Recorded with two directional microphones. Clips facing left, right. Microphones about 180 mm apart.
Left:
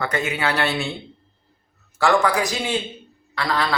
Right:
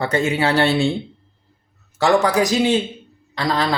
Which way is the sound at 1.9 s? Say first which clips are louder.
Right 3 dB; 20° right (ahead or behind).